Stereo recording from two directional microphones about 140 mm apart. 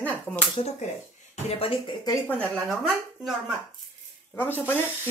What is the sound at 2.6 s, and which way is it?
Speech, centre (ahead or behind).